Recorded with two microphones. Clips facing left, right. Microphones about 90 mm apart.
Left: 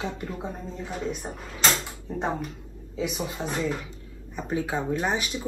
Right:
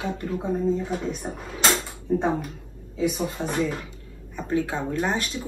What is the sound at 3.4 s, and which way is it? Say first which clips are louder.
Speech: right 2 dB; 15° left (ahead or behind).